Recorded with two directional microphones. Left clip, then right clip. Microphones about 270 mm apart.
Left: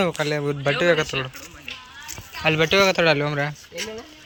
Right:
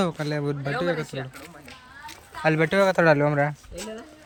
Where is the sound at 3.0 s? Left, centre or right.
Centre.